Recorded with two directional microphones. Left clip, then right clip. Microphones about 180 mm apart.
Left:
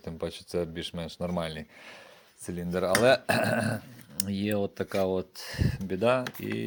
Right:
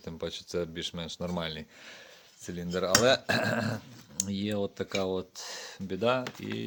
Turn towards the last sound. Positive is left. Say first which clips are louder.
# left 3 dB
turn(degrees=5)  # may be behind; listen again after turning